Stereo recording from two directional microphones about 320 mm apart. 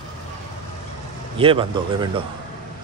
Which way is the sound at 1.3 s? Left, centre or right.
Centre.